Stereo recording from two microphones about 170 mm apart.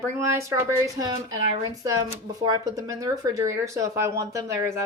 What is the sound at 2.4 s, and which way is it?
Speech, 25° right (ahead or behind).